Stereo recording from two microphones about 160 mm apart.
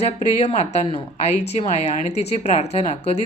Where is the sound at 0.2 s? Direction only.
40° left (ahead or behind).